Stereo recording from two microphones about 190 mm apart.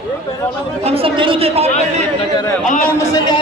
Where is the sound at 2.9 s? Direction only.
15° left (ahead or behind).